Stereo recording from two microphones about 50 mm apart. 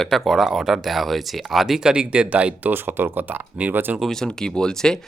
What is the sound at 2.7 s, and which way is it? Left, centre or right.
Speech, right.